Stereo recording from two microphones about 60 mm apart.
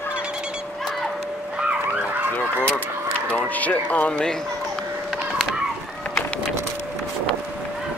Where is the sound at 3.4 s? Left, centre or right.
Left.